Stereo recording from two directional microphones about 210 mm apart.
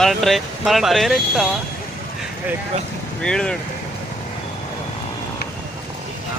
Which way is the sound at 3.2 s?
5° left (ahead or behind).